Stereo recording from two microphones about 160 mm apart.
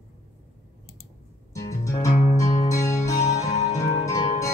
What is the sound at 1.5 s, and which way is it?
Music, 20° left (ahead or behind).